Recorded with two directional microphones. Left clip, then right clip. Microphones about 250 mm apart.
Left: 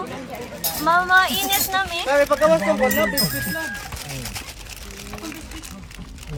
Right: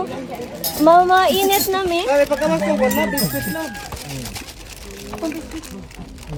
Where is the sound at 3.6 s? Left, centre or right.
Left.